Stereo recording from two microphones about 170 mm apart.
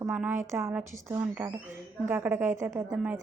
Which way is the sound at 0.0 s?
10° right (ahead or behind).